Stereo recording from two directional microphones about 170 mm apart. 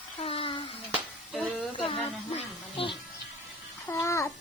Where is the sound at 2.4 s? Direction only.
30° left (ahead or behind).